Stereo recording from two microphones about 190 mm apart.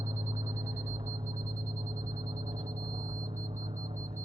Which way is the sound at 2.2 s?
20° right (ahead or behind).